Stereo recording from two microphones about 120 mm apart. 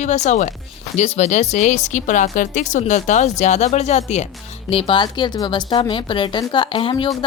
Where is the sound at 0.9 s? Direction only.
65° left (ahead or behind).